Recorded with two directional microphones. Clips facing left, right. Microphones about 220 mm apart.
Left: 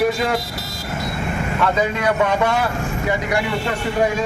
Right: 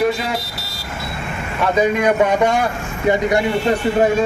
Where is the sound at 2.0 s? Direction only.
15° right (ahead or behind).